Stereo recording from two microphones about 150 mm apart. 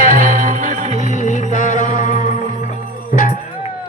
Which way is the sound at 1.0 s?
55° left (ahead or behind).